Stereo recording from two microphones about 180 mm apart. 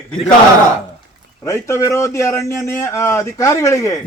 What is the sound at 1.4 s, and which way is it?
A man's voice, 15° left (ahead or behind).